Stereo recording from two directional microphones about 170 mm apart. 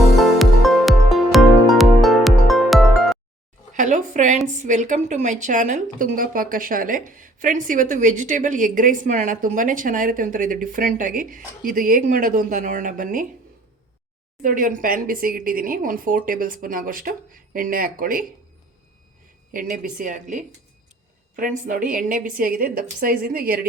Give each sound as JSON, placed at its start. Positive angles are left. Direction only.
{"t": 0.0, "sound": "music", "side_deg": 0}
{"t": 3.8, "sound": "a sound", "side_deg": -50}
{"t": 4.6, "sound": "a woman's voice", "side_deg": -45}
{"t": 14.4, "sound": "speech", "side_deg": -55}
{"t": 19.5, "sound": "a woman's voice", "side_deg": -55}